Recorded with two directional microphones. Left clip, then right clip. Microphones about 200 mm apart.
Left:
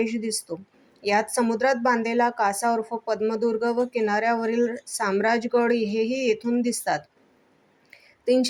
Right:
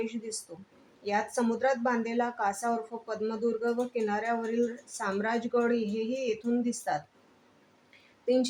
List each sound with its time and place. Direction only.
0.0 s speech: 15° left (ahead or behind)
8.2 s speech: 15° left (ahead or behind)